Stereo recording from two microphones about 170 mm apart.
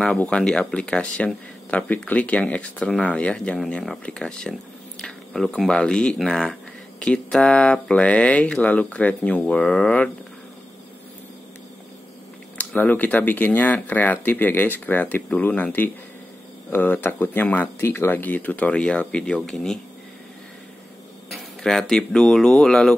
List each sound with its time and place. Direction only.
0.0 s speech: 5° left (ahead or behind)
12.5 s speech: 10° left (ahead or behind)
21.3 s speech: centre (ahead or behind)